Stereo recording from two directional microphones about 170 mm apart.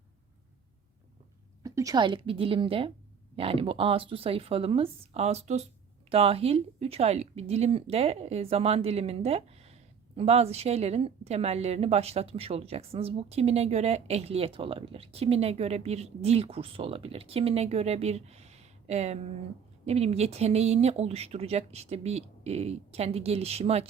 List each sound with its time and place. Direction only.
1.6 s a woman's voice: 20° right (ahead or behind); by 23.9 s 35° right (ahead or behind)